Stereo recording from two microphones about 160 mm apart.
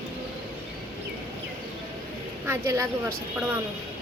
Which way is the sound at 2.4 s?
15° right (ahead or behind).